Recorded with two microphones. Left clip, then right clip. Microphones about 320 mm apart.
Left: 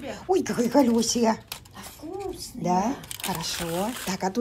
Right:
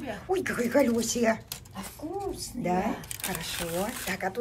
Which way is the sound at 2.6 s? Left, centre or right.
Centre.